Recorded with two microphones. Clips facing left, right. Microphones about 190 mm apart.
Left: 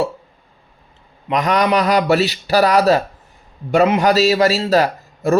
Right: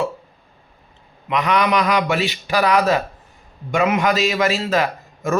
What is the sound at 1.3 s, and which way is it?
A man's voice, 40° left (ahead or behind).